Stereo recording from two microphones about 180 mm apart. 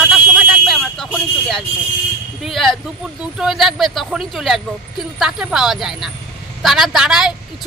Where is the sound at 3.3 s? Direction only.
Centre (ahead or behind).